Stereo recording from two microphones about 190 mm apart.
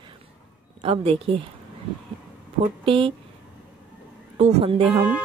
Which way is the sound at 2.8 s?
30° right (ahead or behind).